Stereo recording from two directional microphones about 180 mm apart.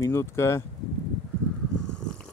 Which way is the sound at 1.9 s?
5° left (ahead or behind).